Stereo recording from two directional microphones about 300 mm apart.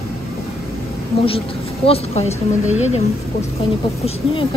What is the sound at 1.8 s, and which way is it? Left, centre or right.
A woman's voice, centre.